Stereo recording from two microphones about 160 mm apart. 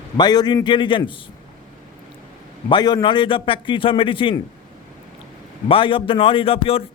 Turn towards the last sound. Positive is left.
turn(degrees=35)  # may be behind; listen again after turning